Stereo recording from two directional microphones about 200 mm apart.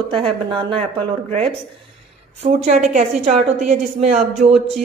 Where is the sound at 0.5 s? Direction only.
25° right (ahead or behind).